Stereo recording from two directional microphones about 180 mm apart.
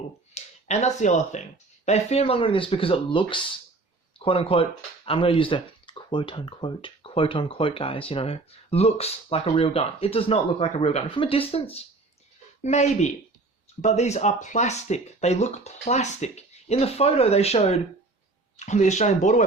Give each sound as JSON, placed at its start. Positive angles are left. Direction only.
{"t": 0.3, "sound": "speech", "side_deg": 40}